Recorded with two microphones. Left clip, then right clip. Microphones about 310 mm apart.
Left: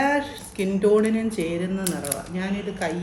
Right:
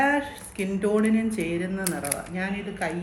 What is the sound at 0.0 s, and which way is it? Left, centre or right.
Speech, centre.